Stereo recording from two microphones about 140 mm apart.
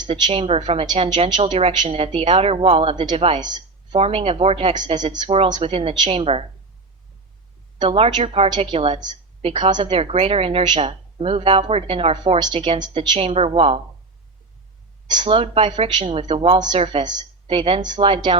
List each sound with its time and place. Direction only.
0.1 s a woman's voice: 40° right (ahead or behind)
4.0 s a woman's voice: 45° right (ahead or behind)
7.8 s a woman's voice: 45° right (ahead or behind)
15.0 s a woman's voice: 30° right (ahead or behind)